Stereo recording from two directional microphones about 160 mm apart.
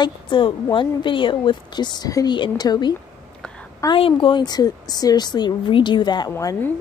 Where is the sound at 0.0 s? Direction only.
30° left (ahead or behind).